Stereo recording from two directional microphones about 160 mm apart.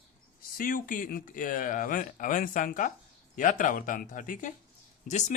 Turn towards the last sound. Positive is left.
turn(degrees=50)  # may be behind; listen again after turning